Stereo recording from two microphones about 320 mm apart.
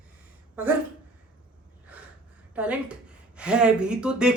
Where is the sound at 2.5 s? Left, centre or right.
Centre.